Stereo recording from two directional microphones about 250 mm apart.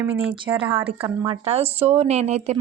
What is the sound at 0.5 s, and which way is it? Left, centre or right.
Speech, right.